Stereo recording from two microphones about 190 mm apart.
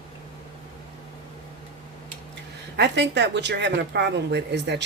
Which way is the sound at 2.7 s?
65° right (ahead or behind).